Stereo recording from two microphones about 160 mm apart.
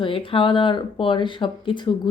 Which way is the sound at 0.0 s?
35° left (ahead or behind).